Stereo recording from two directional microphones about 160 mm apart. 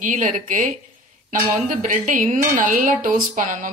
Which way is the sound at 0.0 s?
55° right (ahead or behind).